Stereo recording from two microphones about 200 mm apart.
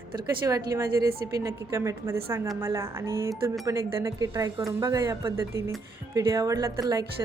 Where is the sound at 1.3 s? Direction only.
15° right (ahead or behind).